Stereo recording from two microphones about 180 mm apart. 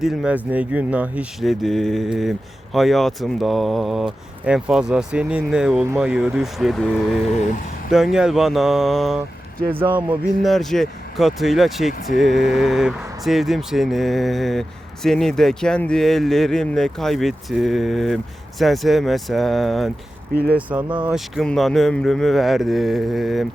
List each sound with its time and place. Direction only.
0.0 s speech: centre (ahead or behind)
7.3 s speech: 40° left (ahead or behind)
7.9 s speech: centre (ahead or behind)
10.5 s speech: centre (ahead or behind)